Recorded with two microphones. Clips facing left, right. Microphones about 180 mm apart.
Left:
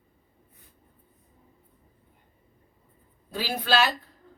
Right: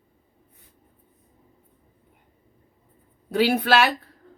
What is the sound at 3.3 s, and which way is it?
Speech, 70° right (ahead or behind).